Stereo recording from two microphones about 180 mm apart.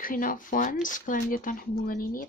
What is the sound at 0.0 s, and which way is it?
Speech, 50° left (ahead or behind).